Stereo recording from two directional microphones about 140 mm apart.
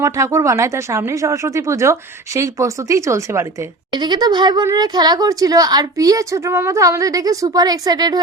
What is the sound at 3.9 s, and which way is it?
Speech, 30° right (ahead or behind).